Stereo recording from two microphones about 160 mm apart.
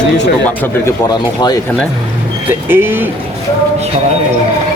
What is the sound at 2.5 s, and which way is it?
Speech, 15° right (ahead or behind).